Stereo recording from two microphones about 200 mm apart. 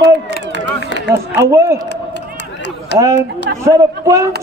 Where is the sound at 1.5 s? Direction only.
15° right (ahead or behind).